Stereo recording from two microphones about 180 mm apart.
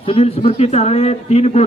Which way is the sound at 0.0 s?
30° left (ahead or behind).